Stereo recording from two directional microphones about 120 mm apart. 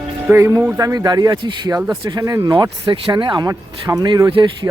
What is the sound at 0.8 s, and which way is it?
Speech, 30° right (ahead or behind).